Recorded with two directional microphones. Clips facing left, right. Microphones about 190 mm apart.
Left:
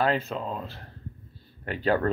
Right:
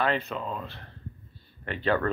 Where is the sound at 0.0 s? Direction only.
40° left (ahead or behind).